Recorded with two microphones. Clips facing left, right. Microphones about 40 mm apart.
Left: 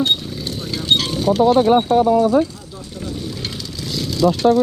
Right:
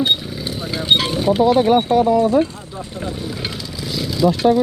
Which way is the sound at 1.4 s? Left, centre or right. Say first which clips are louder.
Left 1 dB; centre.